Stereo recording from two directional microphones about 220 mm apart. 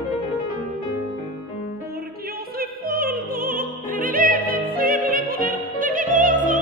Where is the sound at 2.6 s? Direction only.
40° right (ahead or behind).